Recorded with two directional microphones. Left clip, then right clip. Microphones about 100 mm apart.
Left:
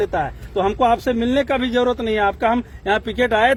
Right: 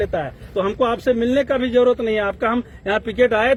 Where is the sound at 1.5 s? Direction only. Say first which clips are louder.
Right 2 dB; 55° left (ahead or behind).